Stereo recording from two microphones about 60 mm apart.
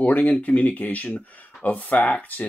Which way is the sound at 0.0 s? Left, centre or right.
Left.